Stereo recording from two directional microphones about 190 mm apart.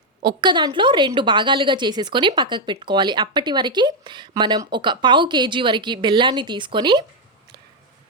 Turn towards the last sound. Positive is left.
turn(degrees=-25)  # may be behind; listen again after turning